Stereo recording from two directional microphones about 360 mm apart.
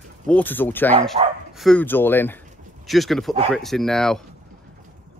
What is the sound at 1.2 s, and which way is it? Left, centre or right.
Speech, centre.